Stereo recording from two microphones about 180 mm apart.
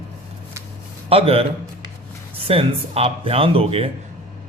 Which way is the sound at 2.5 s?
35° right (ahead or behind).